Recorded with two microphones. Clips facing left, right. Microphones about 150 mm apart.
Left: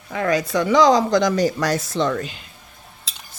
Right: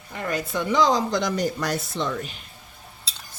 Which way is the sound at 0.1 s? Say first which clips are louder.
Left 7 dB; 90° left.